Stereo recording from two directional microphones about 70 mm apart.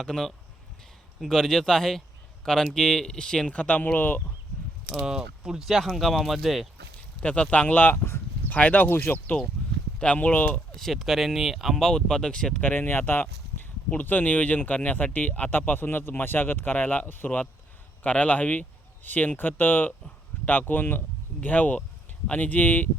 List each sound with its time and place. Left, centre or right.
0.0 s speech: centre; by 4.2 s left
4.9 s speech: centre
7.2 s speech: centre
7.9 s speech: left
8.4 s speech: left
9.1 s speech: left
10.8 s speech: centre
12.6 s speech: left